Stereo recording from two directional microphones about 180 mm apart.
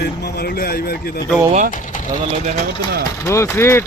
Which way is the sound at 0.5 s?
55° left (ahead or behind).